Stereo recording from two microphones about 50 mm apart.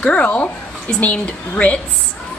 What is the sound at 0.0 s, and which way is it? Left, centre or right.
Speech, left.